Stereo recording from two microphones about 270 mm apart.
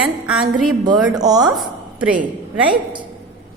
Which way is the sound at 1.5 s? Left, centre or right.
Centre.